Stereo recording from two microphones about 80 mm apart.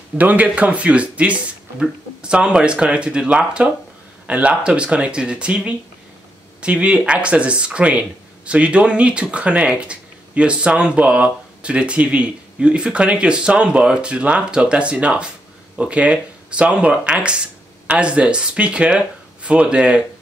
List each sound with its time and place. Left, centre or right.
0.2 s speech: centre